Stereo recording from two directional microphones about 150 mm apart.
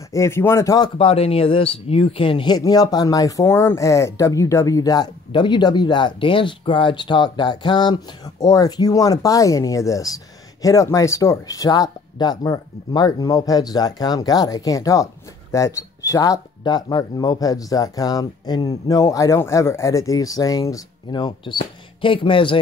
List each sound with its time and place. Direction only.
0.1 s speech: 20° left (ahead or behind)
0.9 s speech: 40° left (ahead or behind)